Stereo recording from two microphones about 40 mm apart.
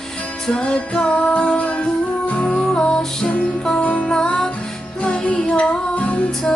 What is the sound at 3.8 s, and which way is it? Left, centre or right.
Music, left.